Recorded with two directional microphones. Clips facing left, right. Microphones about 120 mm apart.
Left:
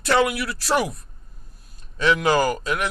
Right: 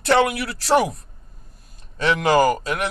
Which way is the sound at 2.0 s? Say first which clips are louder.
Right 2 dB; 25° right (ahead or behind).